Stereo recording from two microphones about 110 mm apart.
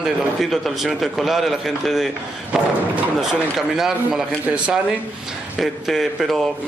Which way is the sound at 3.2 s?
5° right (ahead or behind).